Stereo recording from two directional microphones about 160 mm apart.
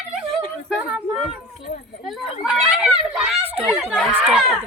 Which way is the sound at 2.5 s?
5° right (ahead or behind).